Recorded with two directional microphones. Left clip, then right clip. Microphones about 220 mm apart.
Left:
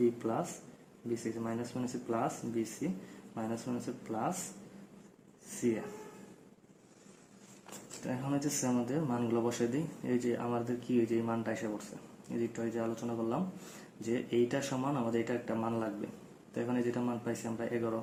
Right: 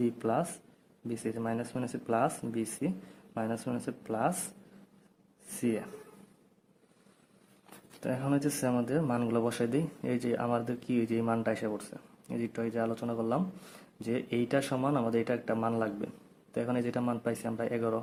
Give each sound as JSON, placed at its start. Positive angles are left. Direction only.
{"t": 0.2, "sound": "speech", "side_deg": -45}
{"t": 8.0, "sound": "speech", "side_deg": -45}